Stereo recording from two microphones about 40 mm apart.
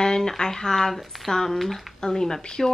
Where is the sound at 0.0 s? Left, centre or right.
Centre.